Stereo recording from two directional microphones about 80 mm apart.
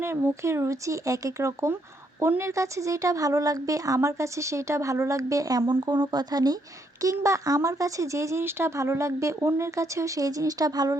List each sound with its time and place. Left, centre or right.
0.0 s speech: right
7.0 s speech: right